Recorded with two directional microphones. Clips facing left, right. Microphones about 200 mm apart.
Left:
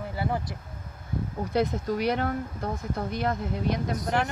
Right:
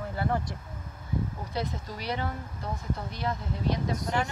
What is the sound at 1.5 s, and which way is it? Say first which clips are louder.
Speech: left 10 dB; 55° left (ahead or behind).